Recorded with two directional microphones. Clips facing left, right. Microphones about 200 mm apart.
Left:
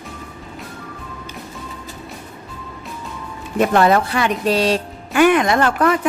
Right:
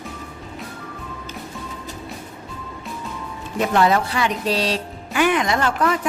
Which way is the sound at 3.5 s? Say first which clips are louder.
Left 3 dB; 55° left (ahead or behind).